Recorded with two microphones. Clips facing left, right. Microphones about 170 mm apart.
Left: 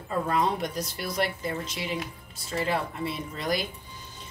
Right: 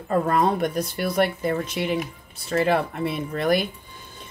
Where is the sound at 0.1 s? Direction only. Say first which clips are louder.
Right 6 dB; 50° right (ahead or behind).